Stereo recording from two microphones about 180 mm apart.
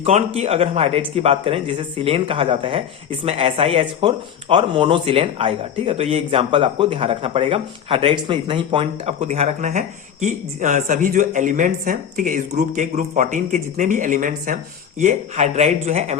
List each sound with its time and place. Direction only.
0.0 s speech: 35° right (ahead or behind)